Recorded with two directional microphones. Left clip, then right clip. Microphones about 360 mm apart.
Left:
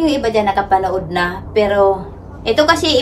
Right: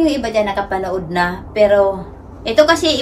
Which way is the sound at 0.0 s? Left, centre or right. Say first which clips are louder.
Left 1 dB; centre.